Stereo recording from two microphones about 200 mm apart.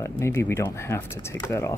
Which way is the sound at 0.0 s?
15° left (ahead or behind).